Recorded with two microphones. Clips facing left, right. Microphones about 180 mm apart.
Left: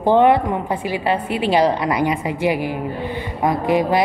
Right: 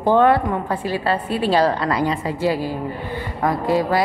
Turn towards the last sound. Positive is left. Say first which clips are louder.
# left 2 dB
turn(degrees=20)  # may be behind; listen again after turning